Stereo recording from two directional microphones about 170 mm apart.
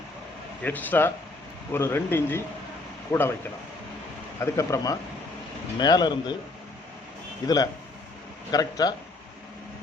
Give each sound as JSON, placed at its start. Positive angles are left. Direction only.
{"t": 0.6, "sound": "speech", "side_deg": 10}
{"t": 7.4, "sound": "speech", "side_deg": 20}